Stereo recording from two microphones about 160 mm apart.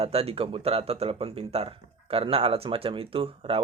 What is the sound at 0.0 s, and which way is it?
Speech, 40° right (ahead or behind).